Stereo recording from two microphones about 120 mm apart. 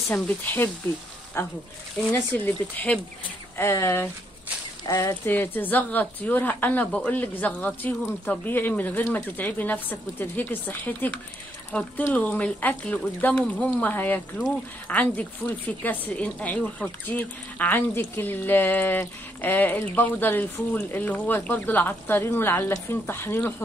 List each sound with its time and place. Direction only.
0.1 s speech: 15° left (ahead or behind)
5.2 s speech: 15° left (ahead or behind)